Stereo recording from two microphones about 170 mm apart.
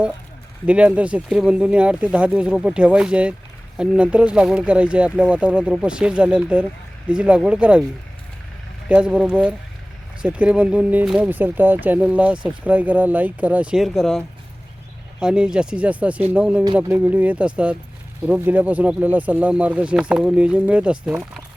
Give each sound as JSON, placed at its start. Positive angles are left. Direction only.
{"t": 0.7, "sound": "speech", "side_deg": -10}
{"t": 8.9, "sound": "speech", "side_deg": -5}